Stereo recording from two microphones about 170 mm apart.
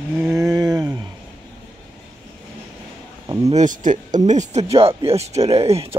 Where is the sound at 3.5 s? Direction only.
45° right (ahead or behind).